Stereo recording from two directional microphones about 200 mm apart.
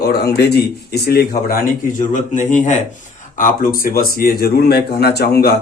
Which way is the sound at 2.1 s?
40° left (ahead or behind).